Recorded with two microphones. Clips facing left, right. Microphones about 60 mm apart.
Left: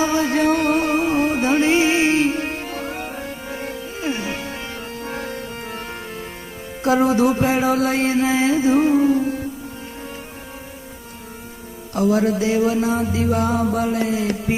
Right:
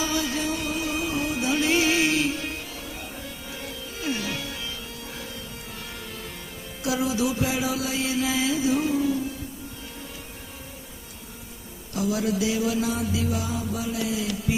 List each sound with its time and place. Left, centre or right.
0.0 s music: left
6.8 s mantra: left
11.9 s music: left